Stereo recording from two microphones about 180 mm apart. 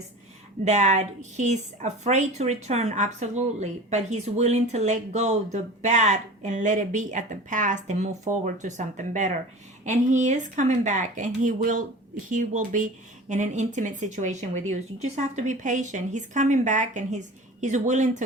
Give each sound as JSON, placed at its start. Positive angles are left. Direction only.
{"t": 0.6, "sound": "a woman's voice", "side_deg": -40}